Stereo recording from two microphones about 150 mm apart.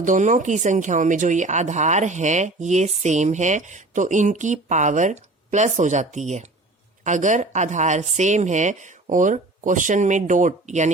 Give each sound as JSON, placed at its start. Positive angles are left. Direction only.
{"t": 0.0, "sound": "speech", "side_deg": -55}